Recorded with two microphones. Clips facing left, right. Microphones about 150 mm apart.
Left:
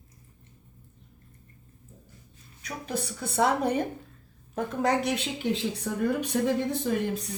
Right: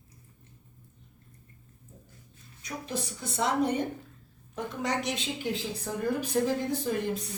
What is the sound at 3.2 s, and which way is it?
Speech, 60° left (ahead or behind).